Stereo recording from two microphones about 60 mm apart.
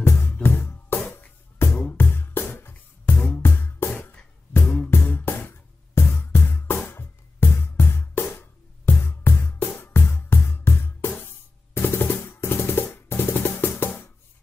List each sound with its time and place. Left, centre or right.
0.0 s music: left
11.7 s drum: left